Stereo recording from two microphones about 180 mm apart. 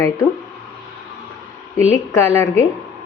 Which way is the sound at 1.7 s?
15° left (ahead or behind).